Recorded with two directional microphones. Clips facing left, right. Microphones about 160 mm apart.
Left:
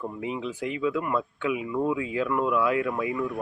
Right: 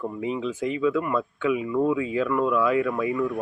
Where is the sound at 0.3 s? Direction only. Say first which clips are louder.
Right 4 dB; 15° left (ahead or behind).